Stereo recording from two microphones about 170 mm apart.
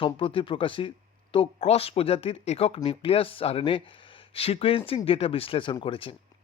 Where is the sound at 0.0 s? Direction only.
30° left (ahead or behind).